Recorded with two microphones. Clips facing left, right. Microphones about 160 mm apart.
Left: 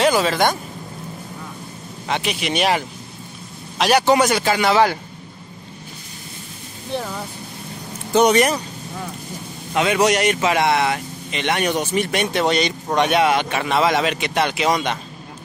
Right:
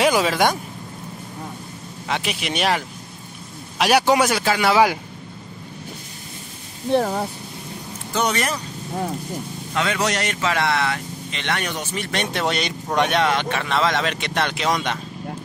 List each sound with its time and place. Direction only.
0.0 s speech: 10° right (ahead or behind)
2.0 s a man's voice: centre (ahead or behind)
6.9 s speech: 50° right (ahead or behind)
8.1 s speech: 20° left (ahead or behind)
9.8 s speech: 15° left (ahead or behind)
12.3 s a man's voice: centre (ahead or behind)